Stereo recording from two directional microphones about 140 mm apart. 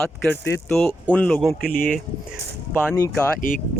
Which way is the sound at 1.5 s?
90° left.